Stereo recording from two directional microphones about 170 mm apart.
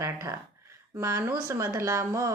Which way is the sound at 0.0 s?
15° right (ahead or behind).